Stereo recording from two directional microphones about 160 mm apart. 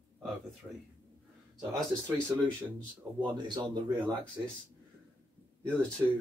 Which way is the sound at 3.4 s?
25° right (ahead or behind).